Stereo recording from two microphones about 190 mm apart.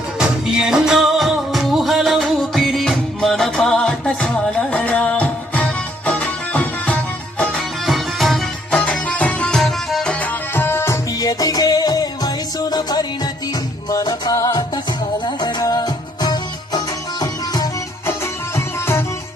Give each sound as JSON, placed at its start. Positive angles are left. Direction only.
{"t": 0.2, "sound": "music", "side_deg": -5}